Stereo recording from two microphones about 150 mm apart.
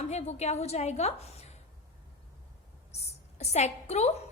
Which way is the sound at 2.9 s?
45° left (ahead or behind).